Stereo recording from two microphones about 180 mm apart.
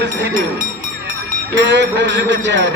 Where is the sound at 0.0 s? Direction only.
70° right (ahead or behind).